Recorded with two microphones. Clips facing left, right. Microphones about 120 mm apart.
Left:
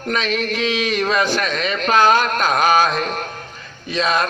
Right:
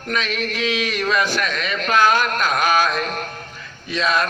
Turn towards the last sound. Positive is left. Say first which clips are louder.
# left 1 dB
turn(degrees=25)  # may be behind; listen again after turning